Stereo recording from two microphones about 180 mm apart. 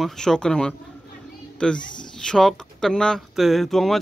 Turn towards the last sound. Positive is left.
turn(degrees=0)  # may be behind; listen again after turning